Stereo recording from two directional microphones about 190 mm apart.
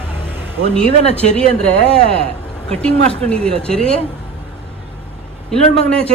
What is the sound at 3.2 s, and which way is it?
Speech, 5° left (ahead or behind).